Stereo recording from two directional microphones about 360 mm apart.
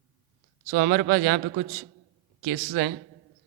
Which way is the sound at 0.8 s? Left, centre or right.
Right.